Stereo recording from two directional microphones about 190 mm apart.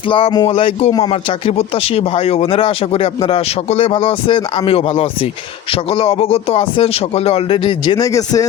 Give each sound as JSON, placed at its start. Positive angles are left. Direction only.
{"t": 0.1, "sound": "speech", "side_deg": 25}